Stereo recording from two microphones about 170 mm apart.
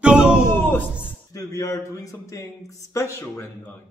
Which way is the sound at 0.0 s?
5° right (ahead or behind).